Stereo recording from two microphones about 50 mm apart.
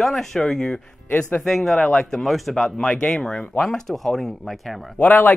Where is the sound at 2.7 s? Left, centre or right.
Centre.